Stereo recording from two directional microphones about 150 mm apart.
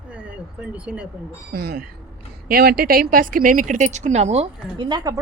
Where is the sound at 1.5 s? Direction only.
90° right.